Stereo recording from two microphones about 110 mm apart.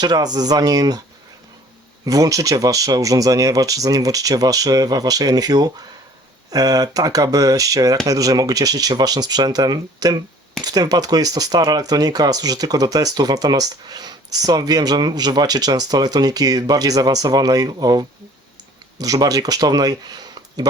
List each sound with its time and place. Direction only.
0.0 s speech: 35° right (ahead or behind)
2.0 s speech: 30° right (ahead or behind)